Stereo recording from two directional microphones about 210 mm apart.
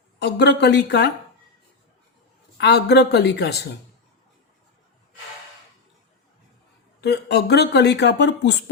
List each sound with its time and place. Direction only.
0.2 s speech: 55° left (ahead or behind)
2.6 s speech: 55° left (ahead or behind)
7.0 s speech: 50° left (ahead or behind)